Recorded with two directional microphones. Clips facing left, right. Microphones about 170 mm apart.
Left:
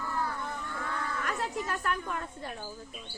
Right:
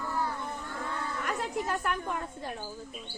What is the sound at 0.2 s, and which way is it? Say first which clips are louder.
Livestock: even; 20° right (ahead or behind).